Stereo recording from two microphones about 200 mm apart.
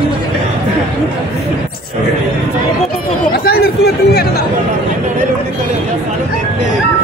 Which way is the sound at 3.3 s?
50° left (ahead or behind).